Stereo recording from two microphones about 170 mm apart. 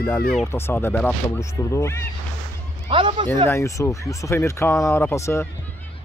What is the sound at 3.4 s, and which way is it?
Speech, 15° left (ahead or behind).